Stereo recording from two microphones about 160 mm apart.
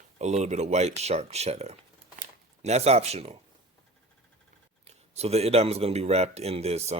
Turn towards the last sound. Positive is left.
turn(degrees=-40)  # may be behind; listen again after turning